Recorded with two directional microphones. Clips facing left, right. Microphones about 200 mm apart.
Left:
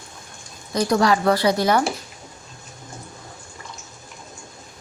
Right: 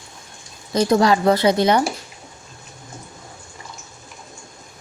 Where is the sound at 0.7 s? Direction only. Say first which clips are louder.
Right 3 dB; 25° right (ahead or behind).